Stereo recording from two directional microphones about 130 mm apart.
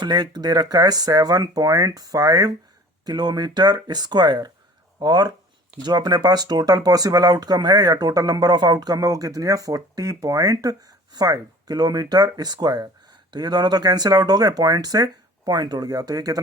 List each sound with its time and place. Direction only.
0.0 s speech: 35° right (ahead or behind)